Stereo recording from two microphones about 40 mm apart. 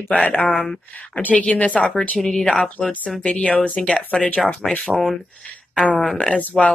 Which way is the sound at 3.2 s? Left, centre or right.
Left.